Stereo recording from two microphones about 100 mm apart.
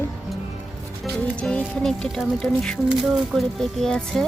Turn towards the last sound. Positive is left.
turn(degrees=5)  # may be behind; listen again after turning